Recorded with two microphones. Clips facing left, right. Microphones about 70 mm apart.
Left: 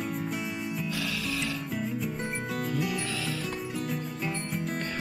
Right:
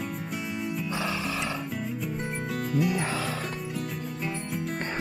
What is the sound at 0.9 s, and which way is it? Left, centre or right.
Music, right.